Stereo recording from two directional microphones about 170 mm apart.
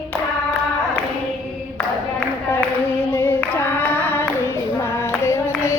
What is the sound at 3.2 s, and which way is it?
Singing, 15° left (ahead or behind).